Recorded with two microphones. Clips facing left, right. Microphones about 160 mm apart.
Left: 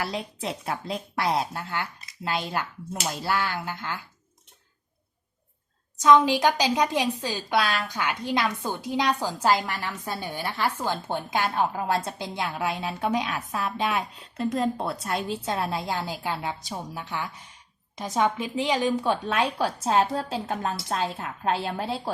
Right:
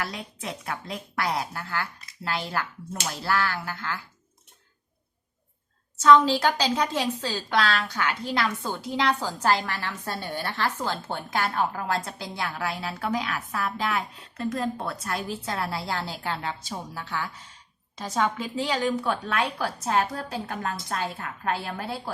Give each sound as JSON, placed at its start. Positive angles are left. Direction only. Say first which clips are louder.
{"t": 0.0, "sound": "a woman's voice", "louder": "left 3 dB", "side_deg": 30}
{"t": 6.0, "sound": "a woman's voice", "louder": "even", "side_deg": 15}